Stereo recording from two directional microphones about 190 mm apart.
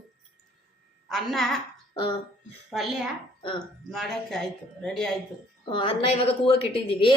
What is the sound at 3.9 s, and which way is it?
Speech, centre (ahead or behind).